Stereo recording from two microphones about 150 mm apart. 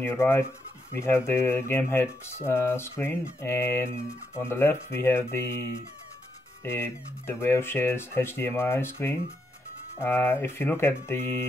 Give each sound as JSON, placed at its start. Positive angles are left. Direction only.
{"t": 0.0, "sound": "speech", "side_deg": 15}